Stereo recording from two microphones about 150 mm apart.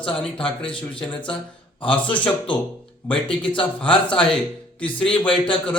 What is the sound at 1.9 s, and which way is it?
Speech, 10° left (ahead or behind).